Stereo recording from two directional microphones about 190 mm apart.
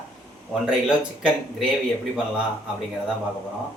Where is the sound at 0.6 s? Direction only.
5° right (ahead or behind).